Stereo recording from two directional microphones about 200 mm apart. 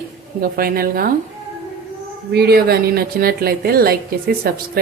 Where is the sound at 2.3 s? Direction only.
50° right (ahead or behind).